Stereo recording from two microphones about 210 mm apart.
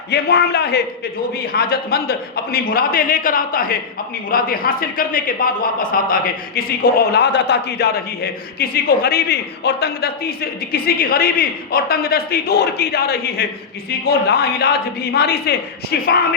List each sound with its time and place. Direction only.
0.1 s a man's voice: 50° left (ahead or behind)